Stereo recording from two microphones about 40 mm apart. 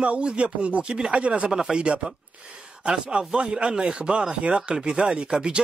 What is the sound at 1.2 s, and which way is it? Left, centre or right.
Speech, right.